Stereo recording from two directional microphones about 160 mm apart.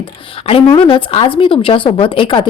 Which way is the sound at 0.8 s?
35° left (ahead or behind).